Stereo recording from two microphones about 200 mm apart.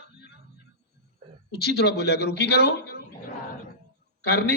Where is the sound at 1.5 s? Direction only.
55° left (ahead or behind).